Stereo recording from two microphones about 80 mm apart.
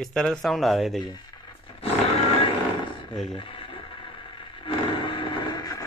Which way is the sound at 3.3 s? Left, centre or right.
Left.